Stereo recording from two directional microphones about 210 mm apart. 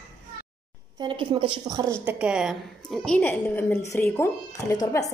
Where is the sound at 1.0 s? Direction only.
20° right (ahead or behind).